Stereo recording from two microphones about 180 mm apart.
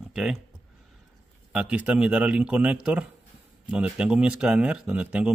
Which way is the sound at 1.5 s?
5° right (ahead or behind).